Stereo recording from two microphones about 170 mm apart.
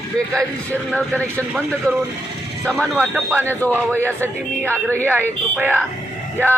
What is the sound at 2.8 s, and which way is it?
A man's voice, 10° right (ahead or behind).